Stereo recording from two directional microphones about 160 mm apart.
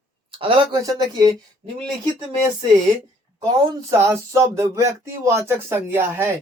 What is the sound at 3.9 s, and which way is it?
Speech, 20° right (ahead or behind).